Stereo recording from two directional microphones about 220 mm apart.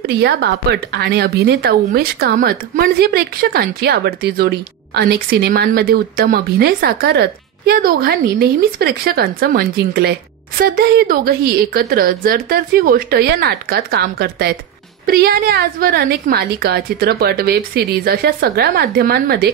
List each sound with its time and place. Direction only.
0.0 s speech: 50° right (ahead or behind)